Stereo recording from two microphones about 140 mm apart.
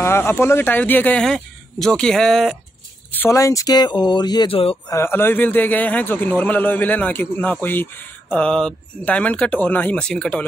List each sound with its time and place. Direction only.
0.0 s speech: 20° left (ahead or behind); by 2.5 s centre (ahead or behind)
3.1 s speech: 15° left (ahead or behind)
4.8 s speech: 20° left (ahead or behind)